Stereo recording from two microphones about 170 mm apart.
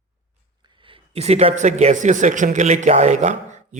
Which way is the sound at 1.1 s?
40° right (ahead or behind).